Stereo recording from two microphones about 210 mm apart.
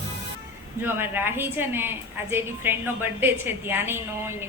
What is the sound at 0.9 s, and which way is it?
A woman's voice, 10° right (ahead or behind).